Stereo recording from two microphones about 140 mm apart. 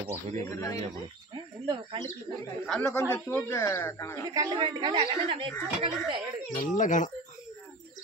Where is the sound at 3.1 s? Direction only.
15° left (ahead or behind).